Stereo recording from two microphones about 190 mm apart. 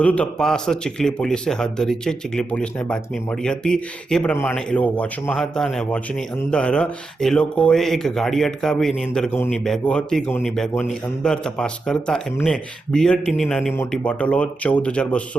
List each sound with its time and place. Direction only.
0.0 s a man's voice: 5° left (ahead or behind)